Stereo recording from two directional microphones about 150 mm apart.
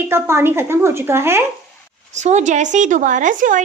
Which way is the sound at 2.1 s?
50° right (ahead or behind).